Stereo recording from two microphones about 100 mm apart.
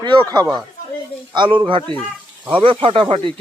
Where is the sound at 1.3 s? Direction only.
50° right (ahead or behind).